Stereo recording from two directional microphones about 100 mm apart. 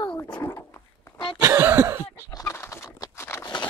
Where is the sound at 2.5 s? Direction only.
25° left (ahead or behind).